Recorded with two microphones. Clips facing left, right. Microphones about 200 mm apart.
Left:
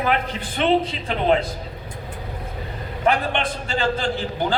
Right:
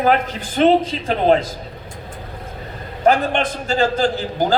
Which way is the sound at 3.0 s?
40° right (ahead or behind).